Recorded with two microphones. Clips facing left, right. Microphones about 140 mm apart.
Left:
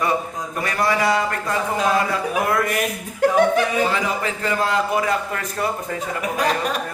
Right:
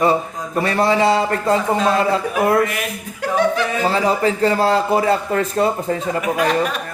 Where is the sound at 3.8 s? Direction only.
35° right (ahead or behind).